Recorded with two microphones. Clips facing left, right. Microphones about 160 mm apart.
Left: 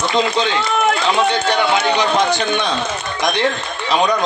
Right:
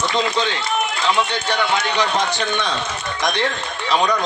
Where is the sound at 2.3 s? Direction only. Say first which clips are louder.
Left 4 dB; 15° left (ahead or behind).